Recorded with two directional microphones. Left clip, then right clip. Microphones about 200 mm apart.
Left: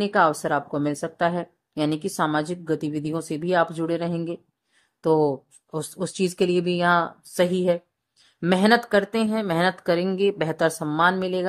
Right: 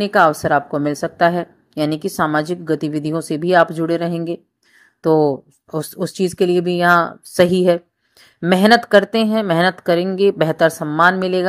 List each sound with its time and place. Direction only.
0.0 s a woman's voice: 10° right (ahead or behind)